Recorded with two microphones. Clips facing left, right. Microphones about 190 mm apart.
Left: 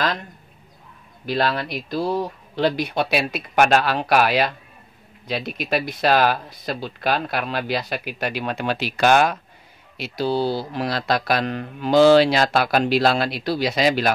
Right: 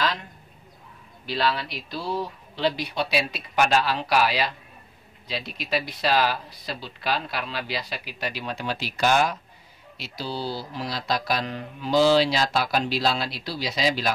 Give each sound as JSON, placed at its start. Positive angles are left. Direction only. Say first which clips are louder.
{"t": 1.2, "sound": "speech", "louder": "left 4 dB", "side_deg": 50}